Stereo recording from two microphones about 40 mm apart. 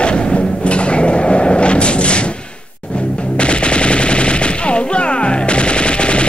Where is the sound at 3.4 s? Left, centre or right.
Left.